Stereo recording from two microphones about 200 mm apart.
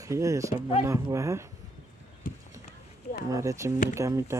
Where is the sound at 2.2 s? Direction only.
45° left (ahead or behind).